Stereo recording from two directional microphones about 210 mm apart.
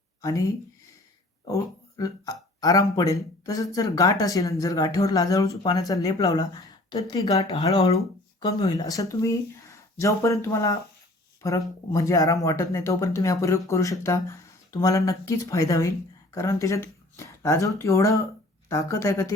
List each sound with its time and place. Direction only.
0.2 s speech: 15° left (ahead or behind)
2.0 s speech: 15° left (ahead or behind)
11.9 s speech: 15° left (ahead or behind)